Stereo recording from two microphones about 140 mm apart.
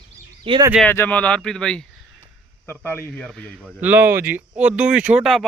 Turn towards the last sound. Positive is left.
turn(degrees=-10)  # may be behind; listen again after turning